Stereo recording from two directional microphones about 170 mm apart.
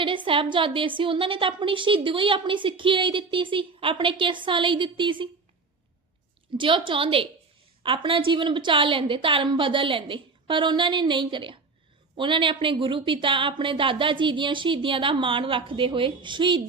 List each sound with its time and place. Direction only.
0.0 s a woman's voice: 30° right (ahead or behind)
6.6 s a woman's voice: 30° right (ahead or behind)